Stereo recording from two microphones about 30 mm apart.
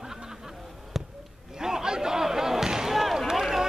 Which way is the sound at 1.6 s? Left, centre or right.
Right.